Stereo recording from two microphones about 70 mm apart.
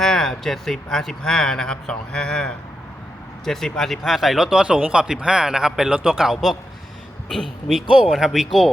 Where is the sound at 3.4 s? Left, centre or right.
Centre.